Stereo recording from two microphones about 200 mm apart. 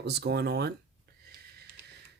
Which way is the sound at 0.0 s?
55° right (ahead or behind).